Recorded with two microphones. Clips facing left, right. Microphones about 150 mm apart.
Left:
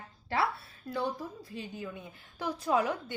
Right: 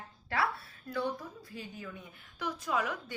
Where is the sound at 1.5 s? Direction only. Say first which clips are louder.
Left 3 dB; 25° left (ahead or behind).